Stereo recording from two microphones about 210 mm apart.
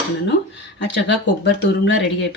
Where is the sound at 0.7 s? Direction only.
60° left (ahead or behind).